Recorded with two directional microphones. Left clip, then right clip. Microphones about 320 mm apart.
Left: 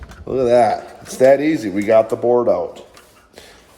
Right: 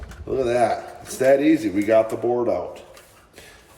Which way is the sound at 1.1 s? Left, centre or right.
Left.